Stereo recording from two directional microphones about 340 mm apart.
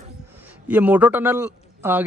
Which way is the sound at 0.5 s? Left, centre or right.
Centre.